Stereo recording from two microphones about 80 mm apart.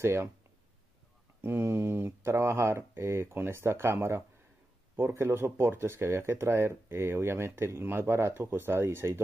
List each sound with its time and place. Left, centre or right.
0.0 s speech: right
1.4 s speech: right